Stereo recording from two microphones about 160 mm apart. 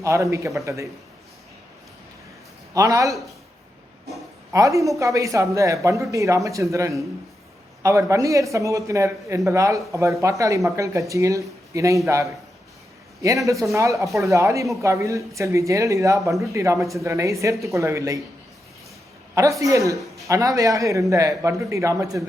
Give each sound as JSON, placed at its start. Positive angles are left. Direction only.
{"t": 0.0, "sound": "speech", "side_deg": -20}
{"t": 2.7, "sound": "speech", "side_deg": -20}
{"t": 4.5, "sound": "speech", "side_deg": -20}
{"t": 19.3, "sound": "speech", "side_deg": -20}